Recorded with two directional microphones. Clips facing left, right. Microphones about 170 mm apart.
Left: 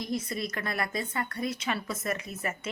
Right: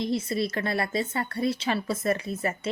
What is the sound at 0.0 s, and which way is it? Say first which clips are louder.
A woman's voice: right 6 dB; 30° right (ahead or behind).